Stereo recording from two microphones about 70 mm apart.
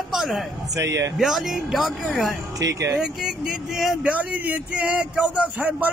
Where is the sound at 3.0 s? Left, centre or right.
Centre.